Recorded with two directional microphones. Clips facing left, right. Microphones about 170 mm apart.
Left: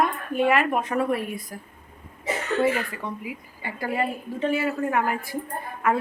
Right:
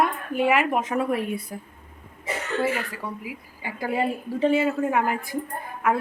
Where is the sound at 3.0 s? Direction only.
10° right (ahead or behind).